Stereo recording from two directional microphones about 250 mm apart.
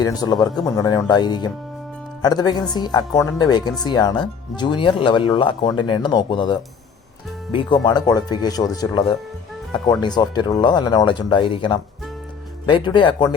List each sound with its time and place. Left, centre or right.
0.0 s speech: centre